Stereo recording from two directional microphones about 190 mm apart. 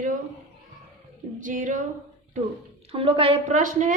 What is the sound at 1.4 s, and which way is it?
Speech, 45° right (ahead or behind).